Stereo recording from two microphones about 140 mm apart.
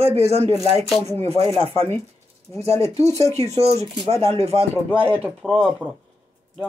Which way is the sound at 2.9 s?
50° right (ahead or behind).